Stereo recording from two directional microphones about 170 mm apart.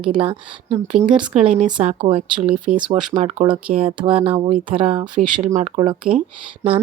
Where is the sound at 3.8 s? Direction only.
30° right (ahead or behind).